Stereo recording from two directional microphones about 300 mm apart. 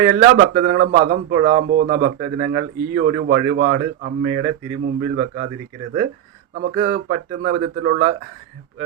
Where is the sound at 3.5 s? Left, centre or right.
Right.